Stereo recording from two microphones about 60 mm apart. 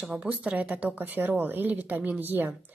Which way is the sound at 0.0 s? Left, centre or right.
Centre.